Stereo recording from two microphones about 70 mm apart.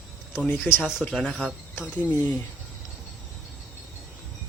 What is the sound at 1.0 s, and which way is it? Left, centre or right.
Speech, centre.